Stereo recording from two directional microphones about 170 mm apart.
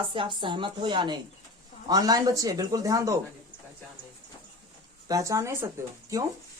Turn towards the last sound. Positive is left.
turn(degrees=-20)  # may be behind; listen again after turning